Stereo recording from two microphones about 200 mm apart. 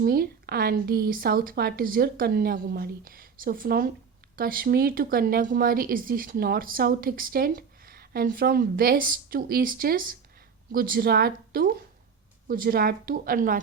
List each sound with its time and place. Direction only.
0.0 s speech: 50° right (ahead or behind)